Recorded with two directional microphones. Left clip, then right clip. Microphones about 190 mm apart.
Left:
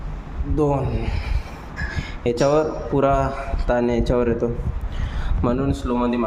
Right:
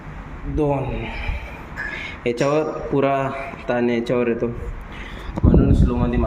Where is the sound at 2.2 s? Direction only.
10° left (ahead or behind).